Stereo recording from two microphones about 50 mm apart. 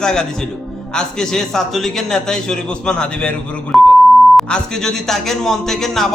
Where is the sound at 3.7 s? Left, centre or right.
Centre.